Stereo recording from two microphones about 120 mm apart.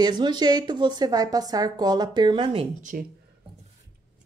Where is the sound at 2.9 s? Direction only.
90° right.